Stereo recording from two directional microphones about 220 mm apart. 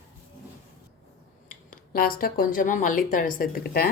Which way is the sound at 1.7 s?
40° left (ahead or behind).